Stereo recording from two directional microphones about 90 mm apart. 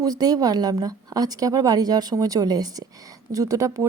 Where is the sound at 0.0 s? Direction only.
45° right (ahead or behind).